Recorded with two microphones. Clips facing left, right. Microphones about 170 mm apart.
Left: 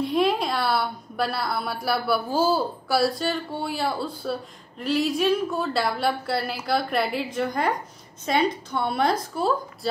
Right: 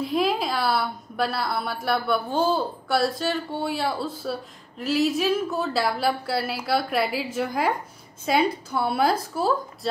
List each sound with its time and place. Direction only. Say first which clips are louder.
0.0 s a woman's voice: left 1 dB; centre (ahead or behind)